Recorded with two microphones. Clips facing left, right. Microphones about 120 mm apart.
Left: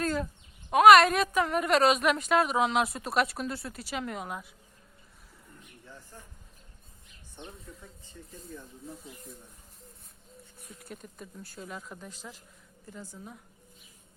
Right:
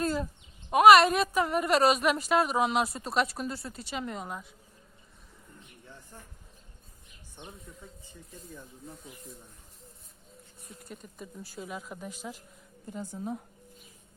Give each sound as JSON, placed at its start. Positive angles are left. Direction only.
{"t": 0.0, "sound": "a sound", "side_deg": -10}
{"t": 0.7, "sound": "a woman's voice", "side_deg": -5}
{"t": 7.4, "sound": "speech", "side_deg": -15}
{"t": 10.7, "sound": "a woman's voice", "side_deg": 0}